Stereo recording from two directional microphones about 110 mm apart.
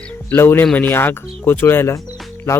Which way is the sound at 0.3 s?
20° left (ahead or behind).